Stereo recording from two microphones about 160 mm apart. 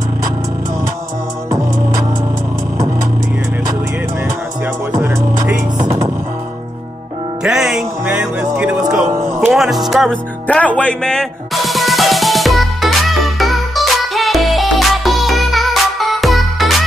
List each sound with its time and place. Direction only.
4.9 s music: 20° right (ahead or behind)
7.4 s music: 5° right (ahead or behind)
9.1 s music: 20° right (ahead or behind)
9.5 s music: centre (ahead or behind)
10.4 s music: 10° left (ahead or behind)